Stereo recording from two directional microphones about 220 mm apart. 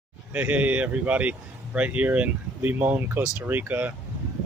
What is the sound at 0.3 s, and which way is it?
Speech, 5° right (ahead or behind).